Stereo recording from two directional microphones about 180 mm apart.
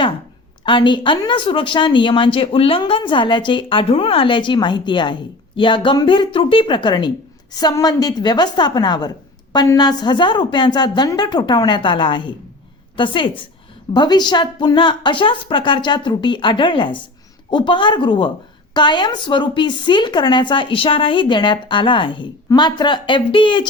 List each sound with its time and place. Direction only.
0.6 s a woman's voice: 25° left (ahead or behind)